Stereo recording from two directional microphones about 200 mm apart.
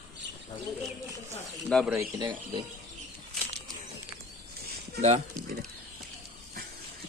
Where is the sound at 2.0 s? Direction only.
20° right (ahead or behind).